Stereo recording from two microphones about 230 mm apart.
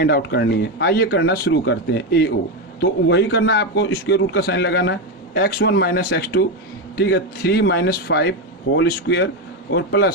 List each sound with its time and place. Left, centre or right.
0.0 s speech: left